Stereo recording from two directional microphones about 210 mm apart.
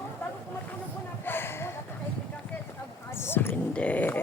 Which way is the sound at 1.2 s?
10° left (ahead or behind).